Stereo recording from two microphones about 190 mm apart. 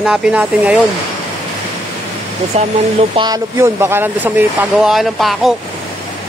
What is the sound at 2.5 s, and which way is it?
Speech, 35° right (ahead or behind).